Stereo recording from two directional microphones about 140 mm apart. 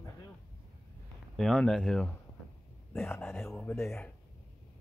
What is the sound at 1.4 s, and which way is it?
Speech, 5° left (ahead or behind).